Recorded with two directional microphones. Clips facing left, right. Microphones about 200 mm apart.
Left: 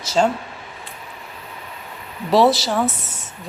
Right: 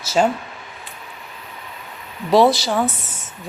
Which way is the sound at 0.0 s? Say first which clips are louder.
Right 1 dB; 5° right (ahead or behind).